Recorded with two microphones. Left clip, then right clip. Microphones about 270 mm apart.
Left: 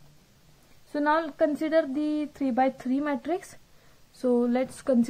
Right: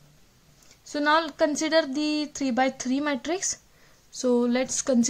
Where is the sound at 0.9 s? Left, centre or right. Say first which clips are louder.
Right 2 dB; right.